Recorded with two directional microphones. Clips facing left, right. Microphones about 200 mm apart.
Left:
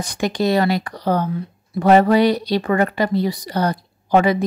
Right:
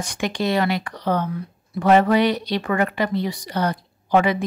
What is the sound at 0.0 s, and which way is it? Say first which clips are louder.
Speech: left 4 dB; 40° left (ahead or behind).